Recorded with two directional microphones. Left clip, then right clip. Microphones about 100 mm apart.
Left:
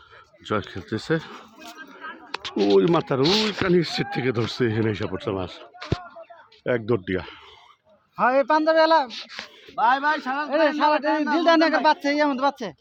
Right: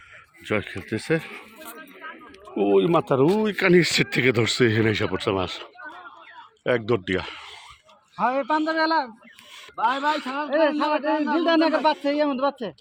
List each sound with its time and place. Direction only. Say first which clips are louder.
0.4 s speech: right 1 dB; 5° left (ahead or behind)
1.6 s a sound: left 4 dB; 5° left (ahead or behind)
2.6 s speech: left 1 dB; 60° left (ahead or behind)
3.1 s speech: right 1 dB; 10° right (ahead or behind)
6.7 s speech: right 1 dB; 30° left (ahead or behind)
9.7 s a man's voice: left 2 dB; 30° left (ahead or behind)